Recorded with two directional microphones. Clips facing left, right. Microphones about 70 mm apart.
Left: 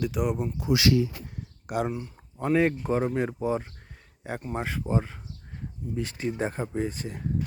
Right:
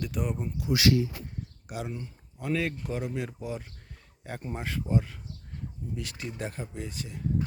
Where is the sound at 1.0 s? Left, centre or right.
Left.